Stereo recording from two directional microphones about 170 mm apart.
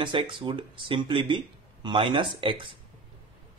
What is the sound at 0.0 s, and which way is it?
Speech, 30° right (ahead or behind).